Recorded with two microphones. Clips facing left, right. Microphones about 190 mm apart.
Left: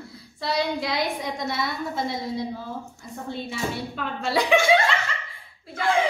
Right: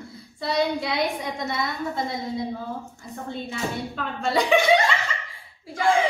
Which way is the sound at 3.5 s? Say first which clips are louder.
Right 1 dB; 5° left (ahead or behind).